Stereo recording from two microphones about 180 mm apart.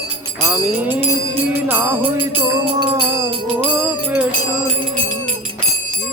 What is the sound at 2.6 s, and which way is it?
Music, 25° right (ahead or behind).